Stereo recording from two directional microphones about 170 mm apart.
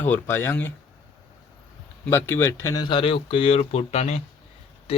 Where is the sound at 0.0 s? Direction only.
10° left (ahead or behind).